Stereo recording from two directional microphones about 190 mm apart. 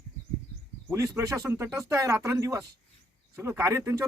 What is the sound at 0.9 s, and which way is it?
Speech, 15° right (ahead or behind).